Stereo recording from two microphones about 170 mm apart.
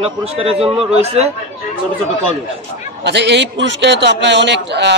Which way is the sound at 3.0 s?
90° right.